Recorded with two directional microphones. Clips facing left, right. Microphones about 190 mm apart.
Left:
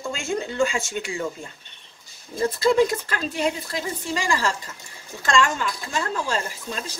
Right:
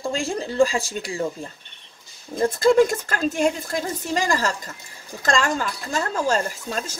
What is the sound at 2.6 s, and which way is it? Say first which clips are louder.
A woman's voice: right 3 dB; 45° right (ahead or behind).